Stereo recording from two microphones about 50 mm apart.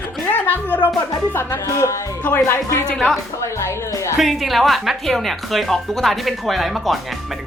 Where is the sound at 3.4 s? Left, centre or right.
Left.